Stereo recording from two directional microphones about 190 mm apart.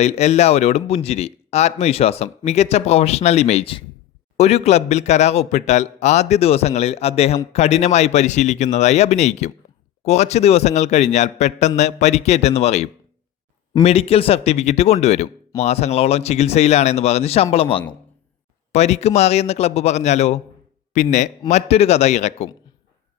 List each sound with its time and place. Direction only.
0.0 s speech: 35° left (ahead or behind)